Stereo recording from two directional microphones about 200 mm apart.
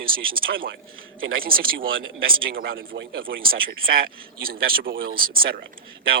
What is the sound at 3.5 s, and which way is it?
Speech, 45° right (ahead or behind).